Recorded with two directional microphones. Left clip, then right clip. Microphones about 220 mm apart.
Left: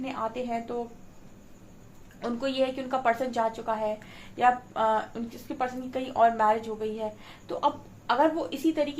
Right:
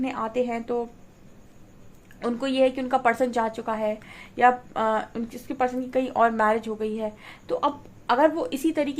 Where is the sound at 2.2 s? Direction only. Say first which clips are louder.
Right 5 dB; 40° right (ahead or behind).